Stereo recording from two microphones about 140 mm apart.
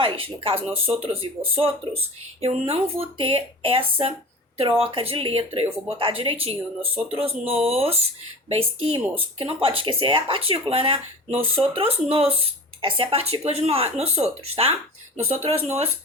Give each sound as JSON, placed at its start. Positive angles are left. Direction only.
{"t": 0.0, "sound": "speech", "side_deg": -40}